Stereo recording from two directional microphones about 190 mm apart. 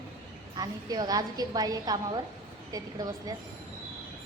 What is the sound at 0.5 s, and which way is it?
A woman's voice, 20° right (ahead or behind).